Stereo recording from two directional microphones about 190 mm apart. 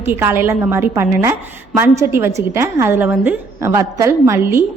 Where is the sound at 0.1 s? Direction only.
10° right (ahead or behind).